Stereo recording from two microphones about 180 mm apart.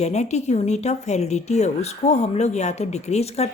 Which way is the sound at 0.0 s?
40° left (ahead or behind).